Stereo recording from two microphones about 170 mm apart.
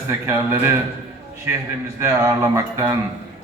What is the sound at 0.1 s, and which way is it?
Speech, 15° right (ahead or behind).